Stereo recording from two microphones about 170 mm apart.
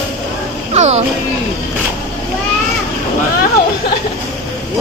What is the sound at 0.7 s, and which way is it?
Speech, 40° right (ahead or behind).